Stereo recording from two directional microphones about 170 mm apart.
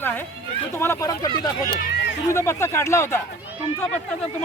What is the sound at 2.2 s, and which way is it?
Speech, 15° left (ahead or behind).